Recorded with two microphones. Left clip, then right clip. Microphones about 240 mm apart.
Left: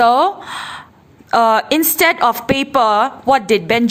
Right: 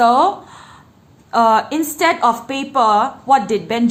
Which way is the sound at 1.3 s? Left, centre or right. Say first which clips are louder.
Left 1 dB; left.